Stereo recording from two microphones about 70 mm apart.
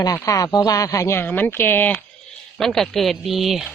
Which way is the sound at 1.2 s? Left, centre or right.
Left.